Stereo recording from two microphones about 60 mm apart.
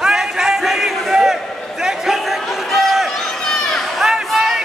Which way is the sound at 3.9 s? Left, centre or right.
Centre.